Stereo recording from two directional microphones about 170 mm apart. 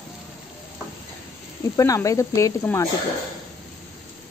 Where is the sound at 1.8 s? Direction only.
20° left (ahead or behind).